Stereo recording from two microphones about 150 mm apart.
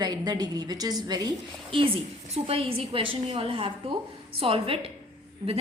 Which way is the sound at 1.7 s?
35° right (ahead or behind).